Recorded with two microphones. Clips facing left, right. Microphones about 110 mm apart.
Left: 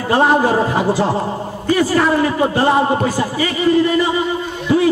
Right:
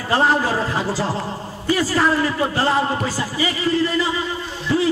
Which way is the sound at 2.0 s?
20° left (ahead or behind).